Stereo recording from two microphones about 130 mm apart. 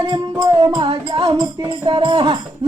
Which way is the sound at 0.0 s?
35° right (ahead or behind).